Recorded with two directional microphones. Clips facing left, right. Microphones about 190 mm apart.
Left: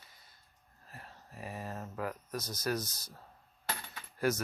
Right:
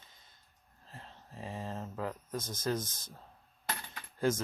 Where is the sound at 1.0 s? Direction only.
25° right (ahead or behind).